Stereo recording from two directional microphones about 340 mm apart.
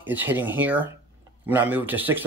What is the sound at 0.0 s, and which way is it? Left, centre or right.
Speech, centre.